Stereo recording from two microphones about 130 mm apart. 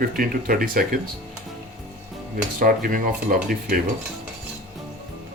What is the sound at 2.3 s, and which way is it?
Speech, 90° right.